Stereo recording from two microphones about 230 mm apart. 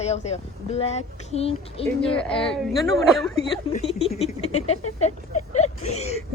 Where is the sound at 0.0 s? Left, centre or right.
Left.